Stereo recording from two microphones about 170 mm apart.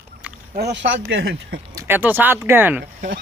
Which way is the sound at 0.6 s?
80° right.